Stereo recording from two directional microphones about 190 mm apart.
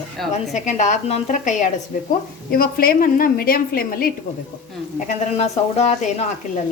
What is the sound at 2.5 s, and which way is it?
A woman's voice, 50° left (ahead or behind).